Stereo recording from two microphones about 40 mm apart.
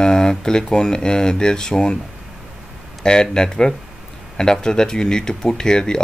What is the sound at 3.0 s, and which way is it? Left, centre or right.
Speech, centre.